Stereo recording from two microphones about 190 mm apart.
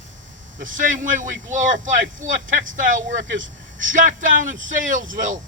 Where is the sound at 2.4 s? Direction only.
90° right.